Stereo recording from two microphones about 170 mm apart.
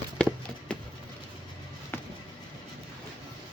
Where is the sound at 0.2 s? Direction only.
5° left (ahead or behind).